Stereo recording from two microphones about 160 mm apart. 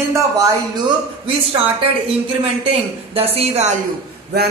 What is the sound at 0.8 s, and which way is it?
Speech, 25° right (ahead or behind).